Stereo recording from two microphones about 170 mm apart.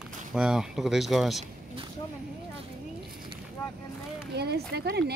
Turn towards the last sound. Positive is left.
turn(degrees=-70)  # may be behind; listen again after turning